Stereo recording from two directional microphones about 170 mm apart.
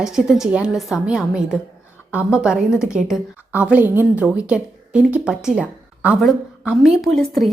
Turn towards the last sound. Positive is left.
turn(degrees=0)  # may be behind; listen again after turning